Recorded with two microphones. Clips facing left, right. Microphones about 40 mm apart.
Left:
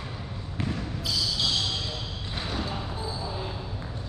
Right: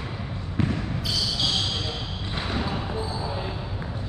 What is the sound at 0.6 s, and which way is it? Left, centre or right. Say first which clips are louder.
Trickle: right 6 dB; centre.